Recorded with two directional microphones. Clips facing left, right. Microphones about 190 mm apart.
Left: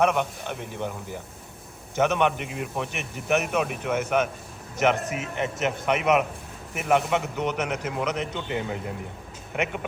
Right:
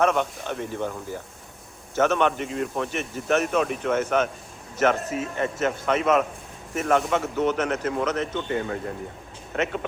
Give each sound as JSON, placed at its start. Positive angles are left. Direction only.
{"t": 0.0, "sound": "a man's voice", "side_deg": 10}
{"t": 2.0, "sound": "a man's voice", "side_deg": 15}